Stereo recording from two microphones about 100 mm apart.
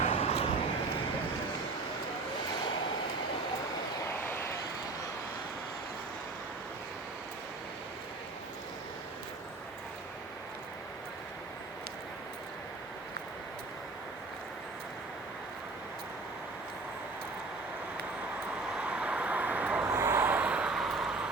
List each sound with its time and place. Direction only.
0.1 s vehicle: 85° left
4.0 s vehicle: 20° left (ahead or behind)
18.7 s vehicle: 10° right (ahead or behind)
19.9 s vehicle: 25° right (ahead or behind); by 21.2 s 5° right (ahead or behind)